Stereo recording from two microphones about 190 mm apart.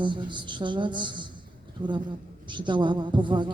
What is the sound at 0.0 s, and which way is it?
A woman's voice, 25° right (ahead or behind).